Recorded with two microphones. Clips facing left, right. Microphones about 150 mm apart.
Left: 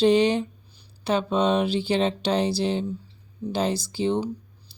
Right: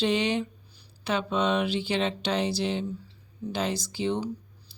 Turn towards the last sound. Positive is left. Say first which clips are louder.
# left 4 dB
turn(degrees=30)  # may be behind; listen again after turning